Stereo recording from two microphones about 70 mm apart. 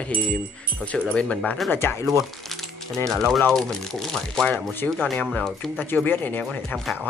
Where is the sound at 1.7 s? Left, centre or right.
Left.